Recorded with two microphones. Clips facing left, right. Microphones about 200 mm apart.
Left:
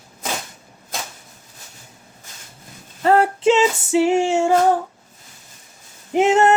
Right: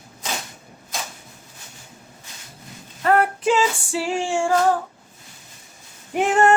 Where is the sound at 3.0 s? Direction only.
25° left (ahead or behind).